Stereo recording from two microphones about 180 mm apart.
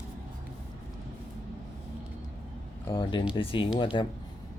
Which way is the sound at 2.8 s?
25° left (ahead or behind).